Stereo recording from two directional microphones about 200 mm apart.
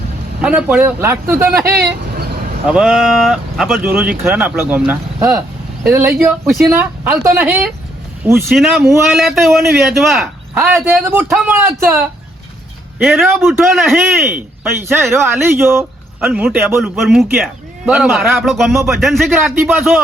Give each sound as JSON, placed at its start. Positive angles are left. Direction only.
{"t": 0.4, "sound": "speech", "side_deg": -5}
{"t": 1.8, "sound": "vehicle", "side_deg": -50}
{"t": 2.6, "sound": "a man's voice", "side_deg": -5}
{"t": 3.8, "sound": "a man's voice", "side_deg": -10}
{"t": 15.5, "sound": "a man's voice", "side_deg": -10}